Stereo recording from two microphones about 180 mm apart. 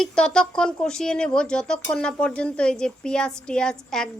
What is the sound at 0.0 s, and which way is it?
Speech, 5° left (ahead or behind).